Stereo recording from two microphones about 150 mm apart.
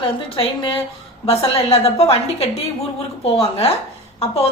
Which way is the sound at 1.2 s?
40° left (ahead or behind).